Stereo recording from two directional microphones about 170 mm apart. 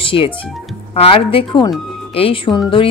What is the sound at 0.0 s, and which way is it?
Speech, 30° left (ahead or behind).